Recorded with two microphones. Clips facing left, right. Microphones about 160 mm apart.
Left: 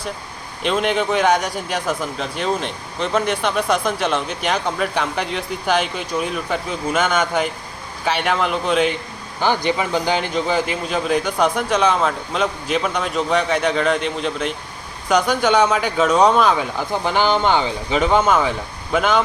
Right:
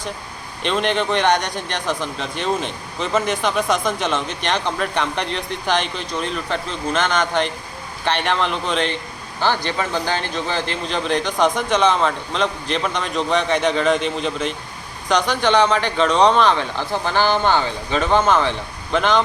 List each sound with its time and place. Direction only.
0.6 s speech: centre (ahead or behind)